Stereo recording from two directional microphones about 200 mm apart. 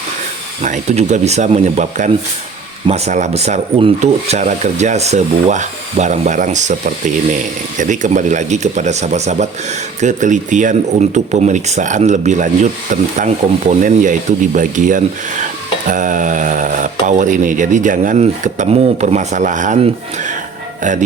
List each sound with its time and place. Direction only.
0.6 s speech: 35° right (ahead or behind)